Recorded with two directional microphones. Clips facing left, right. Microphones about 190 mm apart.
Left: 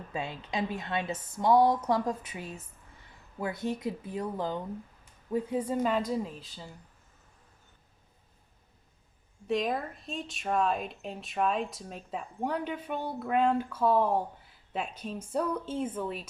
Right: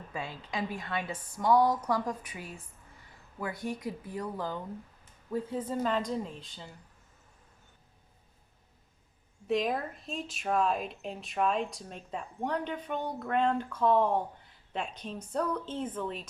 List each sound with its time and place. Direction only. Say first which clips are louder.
0.1 s a woman's voice: left 3 dB; 20° left (ahead or behind); by 6.7 s 5° left (ahead or behind)
9.5 s a woman's voice: even; centre (ahead or behind)